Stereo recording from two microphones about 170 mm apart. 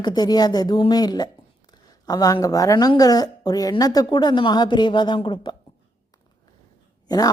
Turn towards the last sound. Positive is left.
turn(degrees=20)  # may be behind; listen again after turning